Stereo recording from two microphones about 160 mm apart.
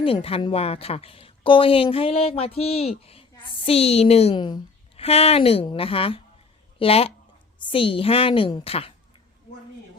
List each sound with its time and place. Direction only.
0.0 s a woman's voice: 35° left (ahead or behind)